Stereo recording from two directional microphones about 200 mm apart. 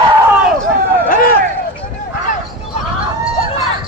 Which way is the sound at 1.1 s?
45° left (ahead or behind).